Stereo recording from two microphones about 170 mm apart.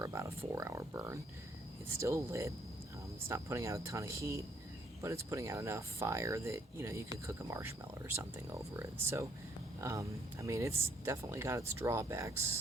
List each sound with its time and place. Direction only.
0.0 s speech: 15° right (ahead or behind)